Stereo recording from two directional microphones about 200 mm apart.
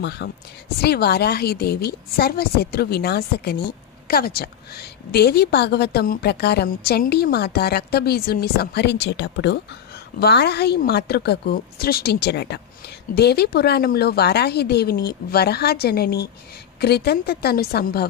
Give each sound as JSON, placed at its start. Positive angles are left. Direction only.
{"t": 0.0, "sound": "a woman's voice", "side_deg": 60}